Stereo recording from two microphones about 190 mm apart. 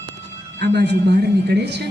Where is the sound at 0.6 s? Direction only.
65° right (ahead or behind).